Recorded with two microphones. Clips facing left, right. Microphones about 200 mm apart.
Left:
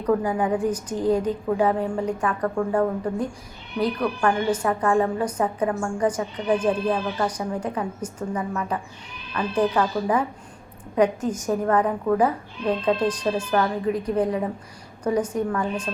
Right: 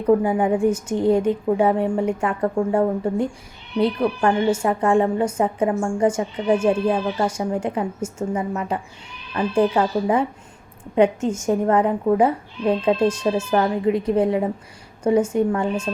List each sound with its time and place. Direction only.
0.0 s speech: 25° right (ahead or behind)